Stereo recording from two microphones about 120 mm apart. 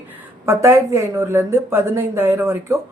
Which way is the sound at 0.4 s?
25° right (ahead or behind).